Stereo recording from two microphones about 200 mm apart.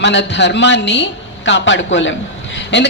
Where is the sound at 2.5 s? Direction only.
60° left (ahead or behind).